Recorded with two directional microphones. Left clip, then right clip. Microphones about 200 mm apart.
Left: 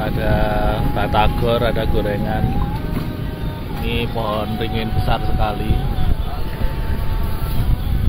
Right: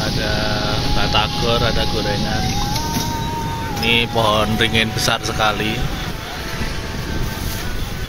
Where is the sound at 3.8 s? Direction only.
10° right (ahead or behind).